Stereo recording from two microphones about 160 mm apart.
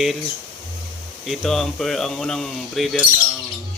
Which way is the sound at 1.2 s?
Centre (ahead or behind).